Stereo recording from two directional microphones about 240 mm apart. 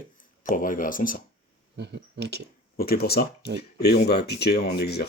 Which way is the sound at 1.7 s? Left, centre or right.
Right.